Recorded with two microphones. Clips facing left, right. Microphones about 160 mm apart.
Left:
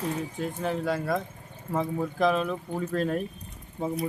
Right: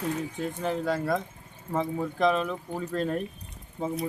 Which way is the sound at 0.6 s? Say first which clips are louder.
Right 1 dB; centre (ahead or behind).